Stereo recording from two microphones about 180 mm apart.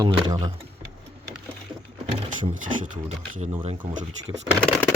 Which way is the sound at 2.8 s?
45° right (ahead or behind).